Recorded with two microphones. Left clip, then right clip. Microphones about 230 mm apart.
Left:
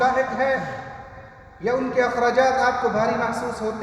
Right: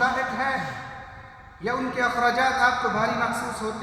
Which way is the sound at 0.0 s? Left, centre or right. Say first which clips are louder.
Left 4 dB; centre.